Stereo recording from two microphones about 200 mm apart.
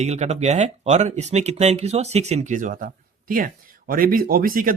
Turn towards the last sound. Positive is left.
turn(degrees=-45)  # may be behind; listen again after turning